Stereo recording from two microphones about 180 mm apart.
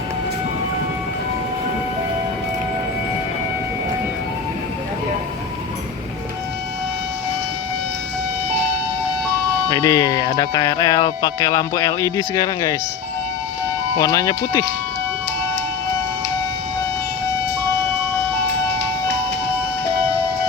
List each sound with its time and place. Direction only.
9.6 s speech: 20° left (ahead or behind)
13.9 s speech: 20° left (ahead or behind)